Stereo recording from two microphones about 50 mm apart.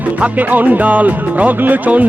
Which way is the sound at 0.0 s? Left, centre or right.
Right.